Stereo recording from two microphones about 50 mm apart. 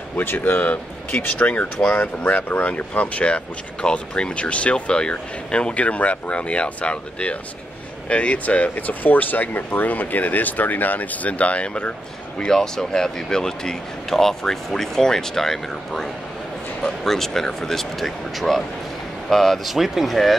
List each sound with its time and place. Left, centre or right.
0.2 s speech: left
12.4 s speech: centre